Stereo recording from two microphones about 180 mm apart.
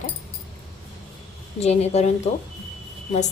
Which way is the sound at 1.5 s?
35° left (ahead or behind).